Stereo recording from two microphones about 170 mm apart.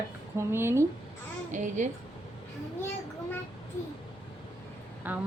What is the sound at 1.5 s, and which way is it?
Speech, 45° right (ahead or behind).